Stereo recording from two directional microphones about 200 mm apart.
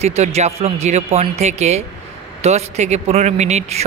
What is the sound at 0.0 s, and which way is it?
Speech, 30° right (ahead or behind).